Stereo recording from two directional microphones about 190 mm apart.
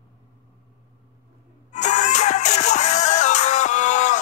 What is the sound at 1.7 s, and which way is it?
Music, 40° left (ahead or behind).